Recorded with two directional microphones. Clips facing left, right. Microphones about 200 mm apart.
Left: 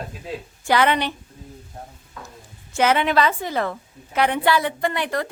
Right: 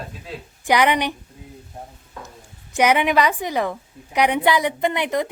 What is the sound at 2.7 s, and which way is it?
A woman's voice, 15° right (ahead or behind).